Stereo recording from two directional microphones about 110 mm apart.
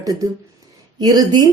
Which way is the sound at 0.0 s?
35° right (ahead or behind).